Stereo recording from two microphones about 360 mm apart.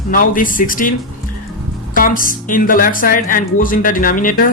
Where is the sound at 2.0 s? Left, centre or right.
Left.